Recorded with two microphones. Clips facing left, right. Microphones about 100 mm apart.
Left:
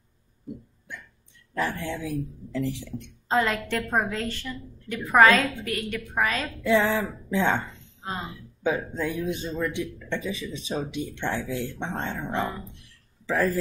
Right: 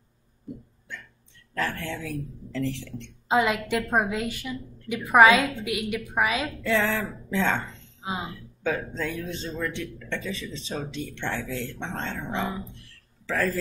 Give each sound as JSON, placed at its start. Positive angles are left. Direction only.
{"t": 0.9, "sound": "hiccup", "side_deg": 15}
{"t": 1.5, "sound": "a man's voice", "side_deg": 15}
{"t": 3.3, "sound": "a woman's voice", "side_deg": -10}
{"t": 6.6, "sound": "a man's voice", "side_deg": 15}
{"t": 8.0, "sound": "speech", "side_deg": -10}
{"t": 8.6, "sound": "a man's voice", "side_deg": 15}
{"t": 13.3, "sound": "a man's voice", "side_deg": 15}